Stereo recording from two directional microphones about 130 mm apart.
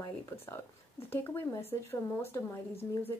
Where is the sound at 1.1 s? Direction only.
20° left (ahead or behind).